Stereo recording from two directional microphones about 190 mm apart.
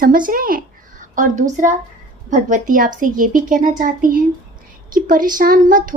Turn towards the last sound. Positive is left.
turn(degrees=-45)  # may be behind; listen again after turning